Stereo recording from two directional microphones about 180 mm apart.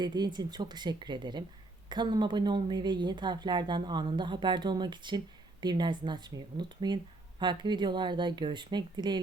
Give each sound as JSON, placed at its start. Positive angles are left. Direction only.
{"t": 0.0, "sound": "speech", "side_deg": -25}